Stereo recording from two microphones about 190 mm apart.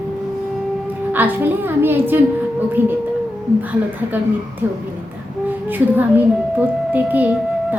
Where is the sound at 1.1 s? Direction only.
10° right (ahead or behind).